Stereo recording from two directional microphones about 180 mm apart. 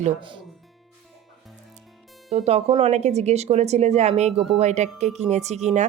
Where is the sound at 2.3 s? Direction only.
35° right (ahead or behind).